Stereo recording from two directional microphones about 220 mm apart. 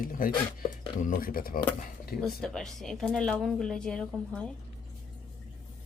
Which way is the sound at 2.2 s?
Centre (ahead or behind).